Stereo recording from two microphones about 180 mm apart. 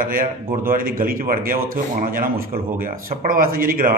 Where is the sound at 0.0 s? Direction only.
50° right (ahead or behind).